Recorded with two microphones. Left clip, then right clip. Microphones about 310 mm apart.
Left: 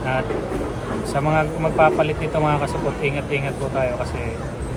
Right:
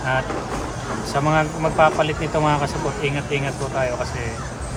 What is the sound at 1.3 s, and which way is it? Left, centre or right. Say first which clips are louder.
Speech: even; centre.